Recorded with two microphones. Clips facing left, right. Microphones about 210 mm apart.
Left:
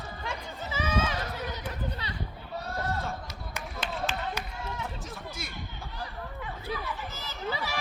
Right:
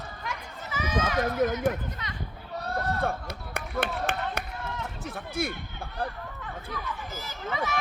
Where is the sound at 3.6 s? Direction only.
60° right (ahead or behind).